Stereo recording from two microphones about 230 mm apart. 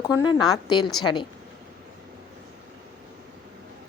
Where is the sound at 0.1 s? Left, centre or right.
Centre.